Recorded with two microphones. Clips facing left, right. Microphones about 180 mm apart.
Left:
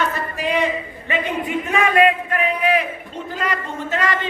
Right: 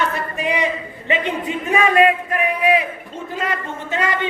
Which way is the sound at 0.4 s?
15° right (ahead or behind).